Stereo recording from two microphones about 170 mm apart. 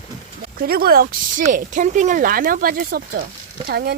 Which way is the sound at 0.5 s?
65° right (ahead or behind).